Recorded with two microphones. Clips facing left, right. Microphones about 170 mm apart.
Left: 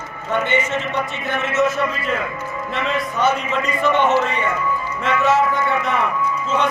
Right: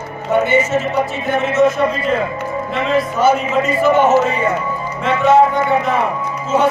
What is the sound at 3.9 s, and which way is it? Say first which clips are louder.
Speech: right 5 dB; 40° right (ahead or behind).